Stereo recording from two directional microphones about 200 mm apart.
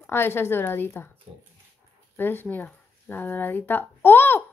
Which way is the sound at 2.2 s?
10° left (ahead or behind).